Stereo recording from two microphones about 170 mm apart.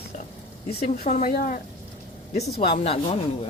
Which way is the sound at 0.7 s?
40° left (ahead or behind).